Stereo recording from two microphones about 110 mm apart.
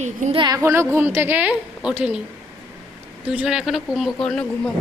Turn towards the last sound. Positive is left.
turn(degrees=10)  # may be behind; listen again after turning